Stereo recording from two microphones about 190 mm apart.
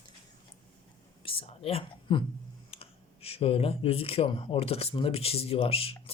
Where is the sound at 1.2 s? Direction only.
30° left (ahead or behind).